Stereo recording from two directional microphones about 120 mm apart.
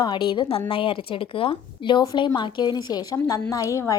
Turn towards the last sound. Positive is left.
turn(degrees=25)  # may be behind; listen again after turning